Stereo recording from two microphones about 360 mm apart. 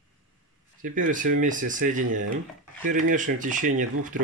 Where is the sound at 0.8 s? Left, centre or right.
Right.